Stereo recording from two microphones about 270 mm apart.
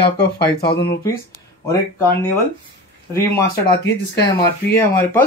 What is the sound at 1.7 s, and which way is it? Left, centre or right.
Speech, centre.